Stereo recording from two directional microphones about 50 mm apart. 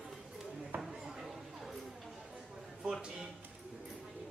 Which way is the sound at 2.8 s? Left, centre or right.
Centre.